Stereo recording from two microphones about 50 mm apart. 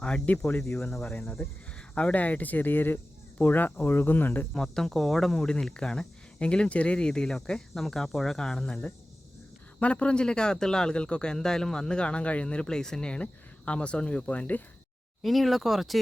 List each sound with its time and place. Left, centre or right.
0.3 s speech: left
0.9 s speech: centre
2.0 s speech: left
4.5 s speech: centre; by 14.6 s left
15.2 s speech: centre